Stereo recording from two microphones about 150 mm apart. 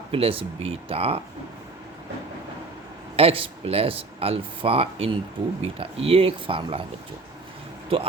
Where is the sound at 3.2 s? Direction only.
40° right (ahead or behind).